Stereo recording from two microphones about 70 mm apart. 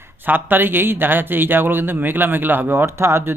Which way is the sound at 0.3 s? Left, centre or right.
Right.